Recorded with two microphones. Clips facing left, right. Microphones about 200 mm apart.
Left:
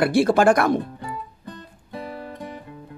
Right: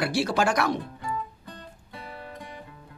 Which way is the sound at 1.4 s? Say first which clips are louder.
Left 5 dB; 45° left (ahead or behind).